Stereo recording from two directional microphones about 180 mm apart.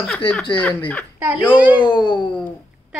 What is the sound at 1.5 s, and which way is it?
Speech, 5° right (ahead or behind).